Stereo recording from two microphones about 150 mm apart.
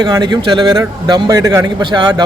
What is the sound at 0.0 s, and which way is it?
A man's voice, 30° right (ahead or behind).